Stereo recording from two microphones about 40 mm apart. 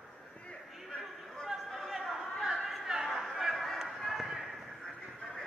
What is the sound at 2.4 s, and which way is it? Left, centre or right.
Chatter, centre.